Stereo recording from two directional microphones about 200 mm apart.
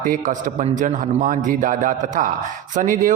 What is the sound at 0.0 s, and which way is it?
A man's voice, 40° right (ahead or behind).